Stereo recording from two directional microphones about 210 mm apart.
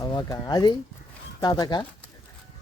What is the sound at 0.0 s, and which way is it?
Speech, 15° left (ahead or behind).